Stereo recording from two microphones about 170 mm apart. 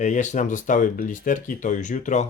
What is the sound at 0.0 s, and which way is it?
Speech, 45° left (ahead or behind).